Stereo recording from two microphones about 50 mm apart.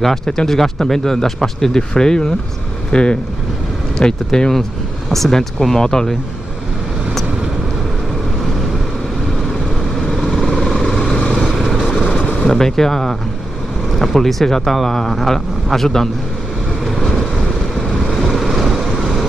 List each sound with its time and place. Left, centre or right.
0.0 s speech: centre
10.0 s vehicle: centre
10.9 s vehicle: centre
11.4 s vehicle: centre
12.0 s gunshot: centre
13.9 s speech: centre
16.8 s vehicle: centre